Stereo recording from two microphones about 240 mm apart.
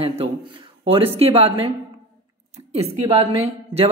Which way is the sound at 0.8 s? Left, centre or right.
Right.